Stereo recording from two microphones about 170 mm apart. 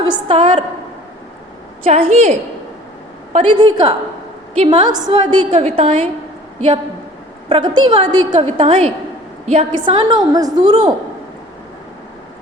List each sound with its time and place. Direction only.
0.0 s a woman's voice: 30° right (ahead or behind)
1.9 s a woman's voice: 40° right (ahead or behind)
3.3 s a woman's voice: 30° right (ahead or behind)
4.9 s a woman's voice: 25° right (ahead or behind)
5.5 s a woman's voice: 40° right (ahead or behind)
7.5 s a woman's voice: 25° right (ahead or behind)